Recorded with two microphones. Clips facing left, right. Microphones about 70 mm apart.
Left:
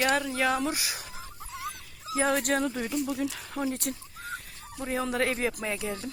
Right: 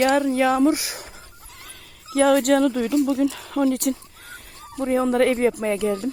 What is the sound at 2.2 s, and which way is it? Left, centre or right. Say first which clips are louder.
Speech: right 10 dB; right.